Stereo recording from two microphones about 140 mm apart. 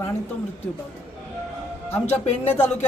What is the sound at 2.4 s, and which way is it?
Speech, 15° left (ahead or behind).